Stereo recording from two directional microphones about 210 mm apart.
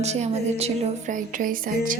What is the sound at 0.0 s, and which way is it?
A woman's voice, 30° right (ahead or behind).